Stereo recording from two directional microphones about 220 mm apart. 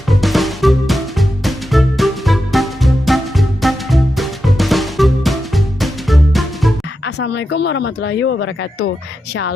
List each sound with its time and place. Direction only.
0.1 s music: centre (ahead or behind)
7.0 s speech: 50° left (ahead or behind)